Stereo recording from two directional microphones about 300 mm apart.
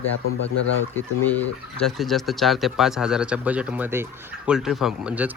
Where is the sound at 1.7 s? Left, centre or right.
Centre.